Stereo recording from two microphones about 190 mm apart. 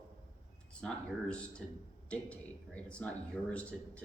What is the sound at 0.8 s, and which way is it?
A man's voice, 5° left (ahead or behind).